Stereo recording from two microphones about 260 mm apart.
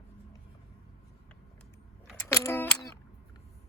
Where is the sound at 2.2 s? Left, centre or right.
Centre.